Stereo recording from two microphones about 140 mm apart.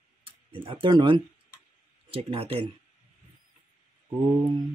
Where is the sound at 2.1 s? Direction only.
45° right (ahead or behind).